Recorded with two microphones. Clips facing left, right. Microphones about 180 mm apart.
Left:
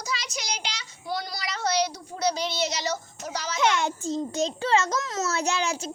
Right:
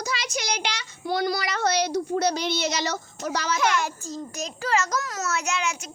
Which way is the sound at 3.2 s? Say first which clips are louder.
Right 5 dB; 65° right (ahead or behind).